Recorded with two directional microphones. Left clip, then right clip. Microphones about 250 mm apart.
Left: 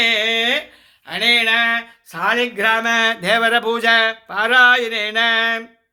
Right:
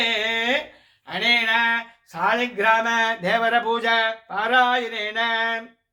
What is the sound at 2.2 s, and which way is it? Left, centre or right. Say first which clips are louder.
Speech: left 3 dB; left.